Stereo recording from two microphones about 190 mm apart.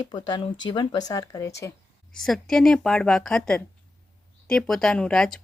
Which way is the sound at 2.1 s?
Centre (ahead or behind).